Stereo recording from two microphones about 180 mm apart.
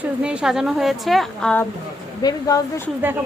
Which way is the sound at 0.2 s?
5° right (ahead or behind).